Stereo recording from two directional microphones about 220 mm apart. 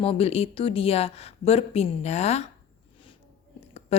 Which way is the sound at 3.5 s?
30° left (ahead or behind).